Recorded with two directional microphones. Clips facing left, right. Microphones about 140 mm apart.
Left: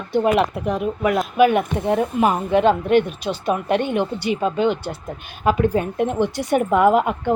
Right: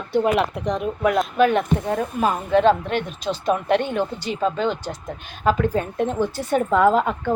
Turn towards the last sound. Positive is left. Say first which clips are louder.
# left 2 dB
turn(degrees=10)  # may be behind; listen again after turning